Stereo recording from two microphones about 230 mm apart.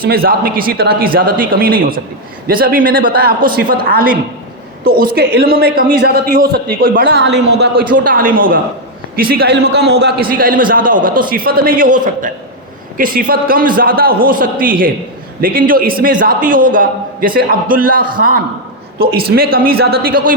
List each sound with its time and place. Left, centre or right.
0.0 s a man's voice: right
7.9 s a man's voice: right